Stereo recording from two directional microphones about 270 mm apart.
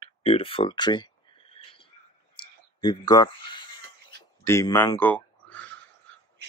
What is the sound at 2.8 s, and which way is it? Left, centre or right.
Speech, centre.